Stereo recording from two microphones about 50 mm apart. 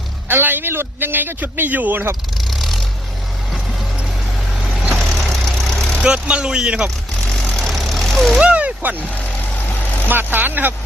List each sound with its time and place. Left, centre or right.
0.3 s speech: right
2.4 s vehicle: centre
4.9 s vehicle: centre
6.0 s speech: centre
7.6 s vehicle: centre
8.4 s a sound: right
10.1 s speech: right